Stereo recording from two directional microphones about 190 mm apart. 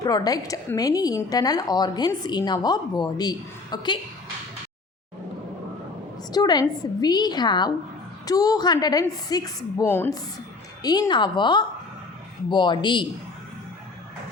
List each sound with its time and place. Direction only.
0.0 s a woman's voice: 20° left (ahead or behind)
6.3 s a woman's voice: 20° left (ahead or behind)